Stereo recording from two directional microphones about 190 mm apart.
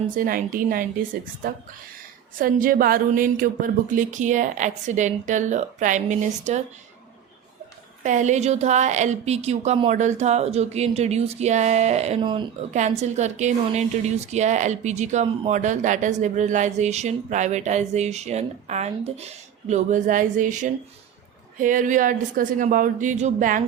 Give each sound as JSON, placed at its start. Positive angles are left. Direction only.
{"t": 0.2, "sound": "a woman's voice", "side_deg": -45}
{"t": 8.0, "sound": "a woman's voice", "side_deg": -40}
{"t": 12.7, "sound": "a woman's voice", "side_deg": -35}